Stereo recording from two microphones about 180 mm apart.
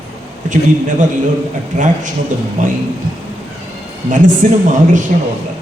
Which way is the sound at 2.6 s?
45° right (ahead or behind).